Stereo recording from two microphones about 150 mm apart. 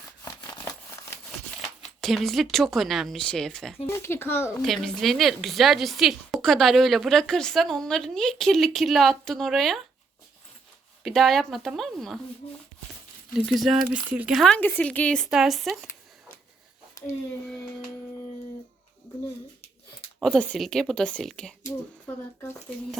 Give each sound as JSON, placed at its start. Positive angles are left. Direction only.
{"t": 1.8, "sound": "speech", "side_deg": 0}
{"t": 3.8, "sound": "speech", "side_deg": 15}
{"t": 4.6, "sound": "speech", "side_deg": 5}
{"t": 11.0, "sound": "speech", "side_deg": 0}
{"t": 13.3, "sound": "speech", "side_deg": 0}
{"t": 14.3, "sound": "speech", "side_deg": 5}
{"t": 17.0, "sound": "a sound", "side_deg": 20}
{"t": 20.3, "sound": "speech", "side_deg": 5}
{"t": 21.7, "sound": "speech", "side_deg": 20}